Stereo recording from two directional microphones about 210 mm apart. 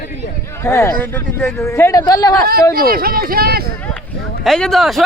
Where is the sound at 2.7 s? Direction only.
45° right (ahead or behind).